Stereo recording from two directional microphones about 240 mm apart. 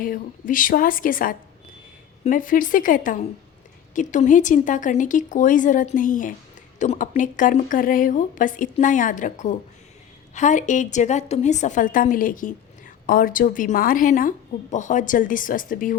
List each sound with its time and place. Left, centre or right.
0.0 s a woman's voice: left